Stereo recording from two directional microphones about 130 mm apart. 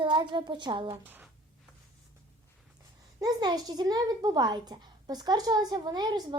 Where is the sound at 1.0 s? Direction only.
15° right (ahead or behind).